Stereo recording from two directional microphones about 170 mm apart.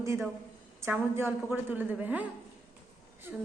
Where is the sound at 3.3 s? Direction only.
10° right (ahead or behind).